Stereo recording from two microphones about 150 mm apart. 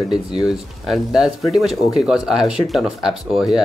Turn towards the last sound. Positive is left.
turn(degrees=0)  # may be behind; listen again after turning